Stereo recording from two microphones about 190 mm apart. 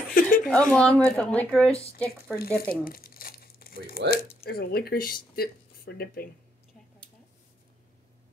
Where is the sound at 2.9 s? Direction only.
50° left (ahead or behind).